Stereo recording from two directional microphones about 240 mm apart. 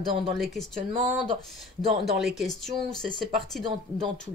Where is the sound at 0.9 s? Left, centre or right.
Right.